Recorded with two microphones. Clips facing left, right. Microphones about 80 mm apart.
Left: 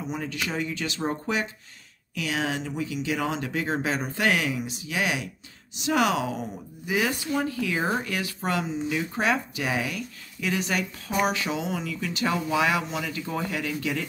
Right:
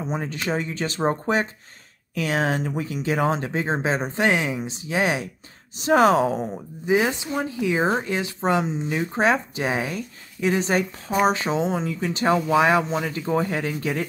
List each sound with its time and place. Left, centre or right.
0.1 s a woman's voice: right